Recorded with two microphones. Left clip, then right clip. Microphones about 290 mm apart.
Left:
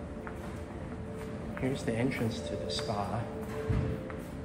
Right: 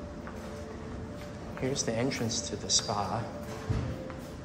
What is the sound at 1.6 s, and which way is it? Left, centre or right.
Speech, centre.